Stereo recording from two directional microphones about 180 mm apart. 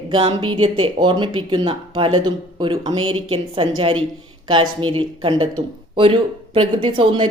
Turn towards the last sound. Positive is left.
turn(degrees=-25)  # may be behind; listen again after turning